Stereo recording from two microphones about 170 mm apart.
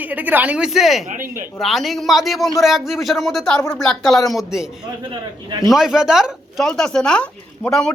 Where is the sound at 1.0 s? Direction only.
50° right (ahead or behind).